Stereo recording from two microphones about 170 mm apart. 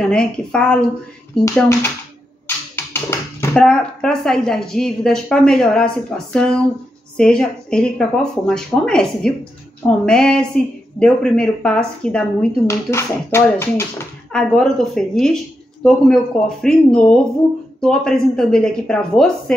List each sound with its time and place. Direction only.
0.0 s a woman's voice: 5° left (ahead or behind)
14.3 s a woman's voice: 5° left (ahead or behind)